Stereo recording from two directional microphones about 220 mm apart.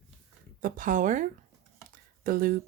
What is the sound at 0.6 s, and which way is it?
Speech, 35° right (ahead or behind).